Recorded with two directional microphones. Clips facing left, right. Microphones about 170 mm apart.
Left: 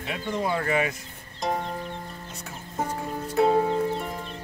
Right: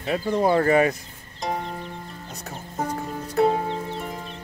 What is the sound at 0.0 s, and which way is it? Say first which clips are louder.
Speech: right 7 dB; 35° right (ahead or behind).